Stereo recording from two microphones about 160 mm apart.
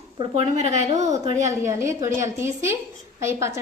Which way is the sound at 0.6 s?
45° right (ahead or behind).